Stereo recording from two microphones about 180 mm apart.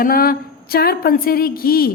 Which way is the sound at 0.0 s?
55° left (ahead or behind).